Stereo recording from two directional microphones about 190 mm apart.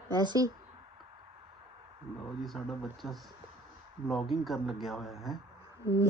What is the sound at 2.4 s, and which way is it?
A man's voice, centre (ahead or behind).